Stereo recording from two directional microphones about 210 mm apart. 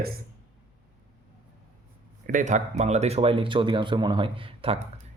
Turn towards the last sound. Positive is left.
turn(degrees=-25)  # may be behind; listen again after turning